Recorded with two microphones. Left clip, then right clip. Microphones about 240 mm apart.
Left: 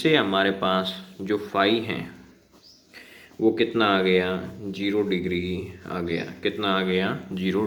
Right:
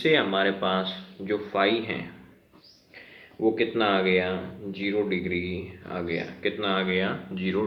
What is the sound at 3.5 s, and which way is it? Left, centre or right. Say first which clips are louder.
Speech: left 2 dB; left.